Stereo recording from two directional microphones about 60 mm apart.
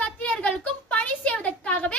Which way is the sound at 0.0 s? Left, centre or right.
Centre.